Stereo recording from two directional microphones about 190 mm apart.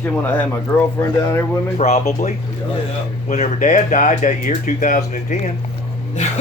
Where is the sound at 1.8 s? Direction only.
35° left (ahead or behind).